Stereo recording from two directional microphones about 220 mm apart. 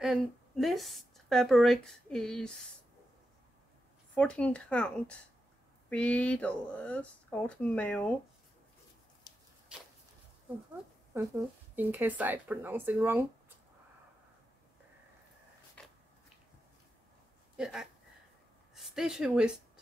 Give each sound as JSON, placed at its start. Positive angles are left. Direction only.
{"t": 0.0, "sound": "a woman's voice", "side_deg": 0}
{"t": 4.1, "sound": "speech", "side_deg": 5}
{"t": 9.3, "sound": "a sound", "side_deg": 20}
{"t": 11.7, "sound": "speech", "side_deg": -10}
{"t": 15.8, "sound": "a sound", "side_deg": 5}
{"t": 17.6, "sound": "speech", "side_deg": -5}